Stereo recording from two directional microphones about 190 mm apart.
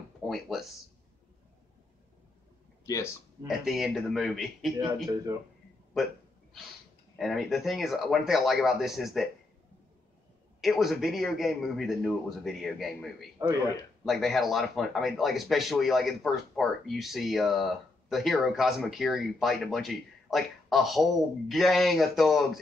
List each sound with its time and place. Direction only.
0.3 s speech: centre (ahead or behind)
2.8 s speech: 15° left (ahead or behind)
3.4 s speech: centre (ahead or behind)
4.7 s speech: 20° right (ahead or behind)
5.9 s speech: centre (ahead or behind)
7.2 s speech: centre (ahead or behind)
10.6 s speech: centre (ahead or behind)